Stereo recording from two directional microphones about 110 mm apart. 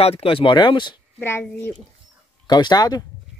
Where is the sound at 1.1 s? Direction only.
20° left (ahead or behind).